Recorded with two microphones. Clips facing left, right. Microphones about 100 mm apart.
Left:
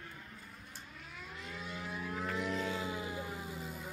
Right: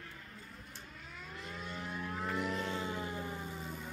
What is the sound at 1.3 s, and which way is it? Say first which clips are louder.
Civil defense siren: right 1 dB; centre (ahead or behind).